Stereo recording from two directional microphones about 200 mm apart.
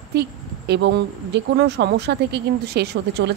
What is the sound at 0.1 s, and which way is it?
Speech, 55° right (ahead or behind).